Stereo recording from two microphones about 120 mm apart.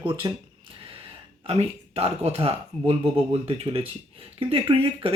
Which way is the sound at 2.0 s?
60° right (ahead or behind).